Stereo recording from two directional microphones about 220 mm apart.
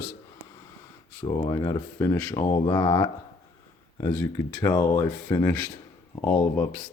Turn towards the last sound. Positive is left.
turn(degrees=5)  # may be behind; listen again after turning